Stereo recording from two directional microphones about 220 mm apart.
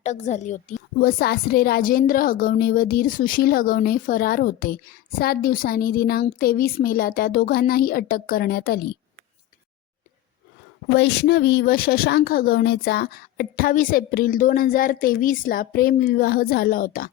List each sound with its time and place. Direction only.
0.0 s a woman's voice: 30° left (ahead or behind)
10.9 s a woman's voice: 50° left (ahead or behind)